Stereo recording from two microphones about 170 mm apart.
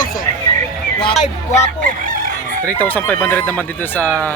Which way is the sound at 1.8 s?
55° right (ahead or behind).